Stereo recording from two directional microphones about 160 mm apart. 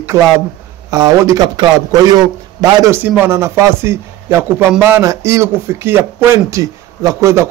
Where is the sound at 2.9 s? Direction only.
10° right (ahead or behind).